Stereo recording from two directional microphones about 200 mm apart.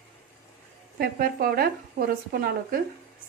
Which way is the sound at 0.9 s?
50° right (ahead or behind).